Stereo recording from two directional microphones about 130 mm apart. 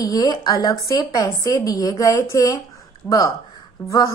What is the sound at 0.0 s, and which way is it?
A woman's voice, 30° left (ahead or behind).